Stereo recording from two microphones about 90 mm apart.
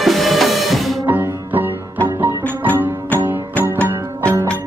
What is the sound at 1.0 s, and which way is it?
Music, 20° right (ahead or behind).